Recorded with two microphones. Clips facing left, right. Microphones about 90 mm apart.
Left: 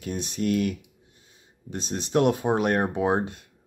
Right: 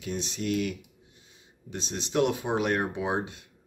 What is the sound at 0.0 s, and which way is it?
Speech, 45° left (ahead or behind).